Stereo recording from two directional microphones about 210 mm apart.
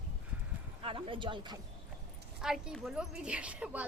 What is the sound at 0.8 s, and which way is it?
Speech, 25° right (ahead or behind).